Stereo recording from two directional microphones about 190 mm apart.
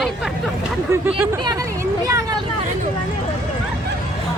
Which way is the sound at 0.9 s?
15° right (ahead or behind).